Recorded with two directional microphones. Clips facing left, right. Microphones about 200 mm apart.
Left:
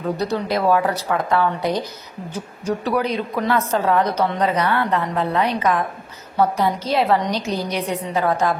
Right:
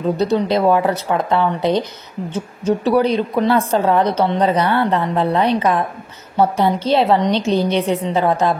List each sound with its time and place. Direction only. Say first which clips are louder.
0.2 s speech: right 6 dB; 25° right (ahead or behind)